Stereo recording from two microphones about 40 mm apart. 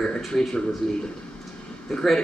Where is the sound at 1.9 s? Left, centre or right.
Centre.